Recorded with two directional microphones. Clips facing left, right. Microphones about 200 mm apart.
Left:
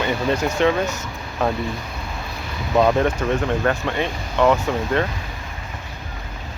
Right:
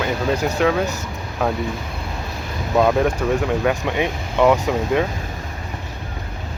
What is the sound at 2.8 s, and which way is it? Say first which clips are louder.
Speech: even; centre (ahead or behind).